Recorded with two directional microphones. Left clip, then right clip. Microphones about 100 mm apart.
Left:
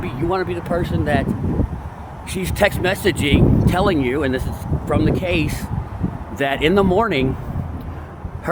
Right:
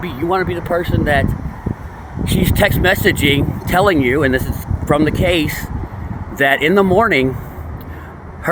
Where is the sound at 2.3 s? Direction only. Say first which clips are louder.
Right 3 dB; 15° right (ahead or behind).